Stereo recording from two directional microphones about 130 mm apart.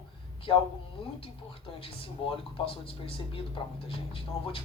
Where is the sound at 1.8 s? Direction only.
45° left (ahead or behind).